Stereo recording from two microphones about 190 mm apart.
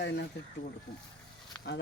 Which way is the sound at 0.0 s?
65° left (ahead or behind).